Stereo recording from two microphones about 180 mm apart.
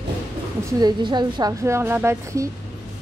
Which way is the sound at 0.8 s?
25° right (ahead or behind).